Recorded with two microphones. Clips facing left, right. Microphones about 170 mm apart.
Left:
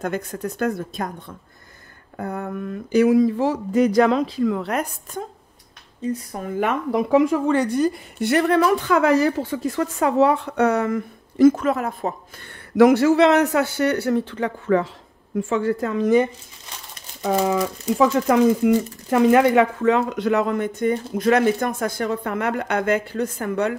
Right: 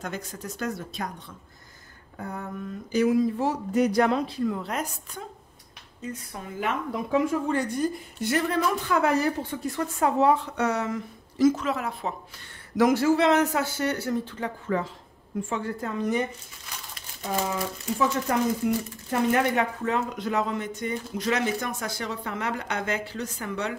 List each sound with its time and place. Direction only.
0.0 s speech: 55° left (ahead or behind)
2.1 s a woman's voice: 65° left (ahead or behind)
6.1 s speech: 50° left (ahead or behind)
6.9 s a woman's voice: 80° left; by 12.1 s 50° left (ahead or behind)
12.7 s a woman's voice: 70° left (ahead or behind)
15.3 s speech: 90° left
17.9 s speech: 90° left; by 23.8 s 55° left (ahead or behind)